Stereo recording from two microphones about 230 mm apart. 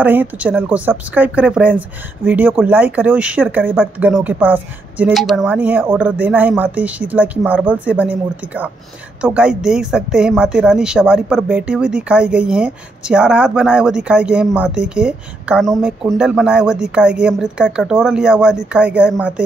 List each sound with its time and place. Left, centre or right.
0.0 s a woman's voice: centre